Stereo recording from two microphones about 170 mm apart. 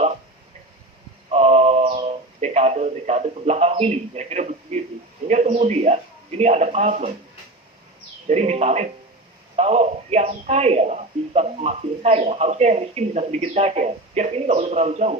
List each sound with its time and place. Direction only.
1.3 s a sound: 40° right (ahead or behind)
5.3 s speech: 40° right (ahead or behind)
8.3 s speech: 40° right (ahead or behind)